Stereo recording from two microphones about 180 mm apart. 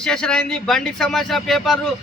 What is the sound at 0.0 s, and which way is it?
Speech, 5° left (ahead or behind).